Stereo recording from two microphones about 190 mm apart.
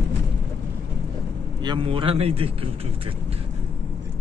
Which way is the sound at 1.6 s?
25° right (ahead or behind).